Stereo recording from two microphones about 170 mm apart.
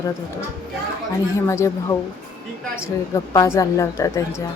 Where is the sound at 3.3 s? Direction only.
20° left (ahead or behind).